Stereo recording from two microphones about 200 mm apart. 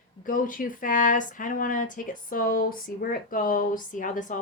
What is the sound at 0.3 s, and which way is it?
A woman's voice, 45° left (ahead or behind).